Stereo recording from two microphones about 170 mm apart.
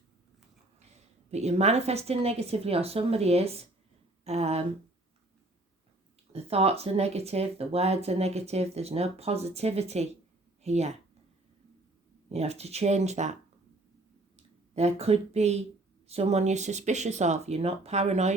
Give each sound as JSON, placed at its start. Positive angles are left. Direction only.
{"t": 1.3, "sound": "speech", "side_deg": -40}
{"t": 6.3, "sound": "speech", "side_deg": -35}
{"t": 12.3, "sound": "speech", "side_deg": -40}
{"t": 14.3, "sound": "speech", "side_deg": -40}